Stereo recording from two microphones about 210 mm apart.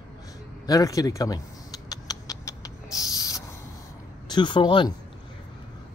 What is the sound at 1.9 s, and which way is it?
Rodents, 15° left (ahead or behind).